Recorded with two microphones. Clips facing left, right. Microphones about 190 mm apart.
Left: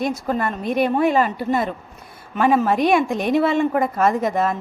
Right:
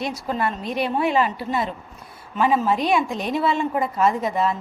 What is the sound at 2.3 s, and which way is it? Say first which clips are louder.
A woman's voice: left 3 dB; 60° left (ahead or behind).